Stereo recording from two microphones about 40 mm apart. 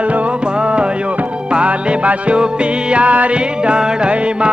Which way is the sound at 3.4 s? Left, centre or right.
Right.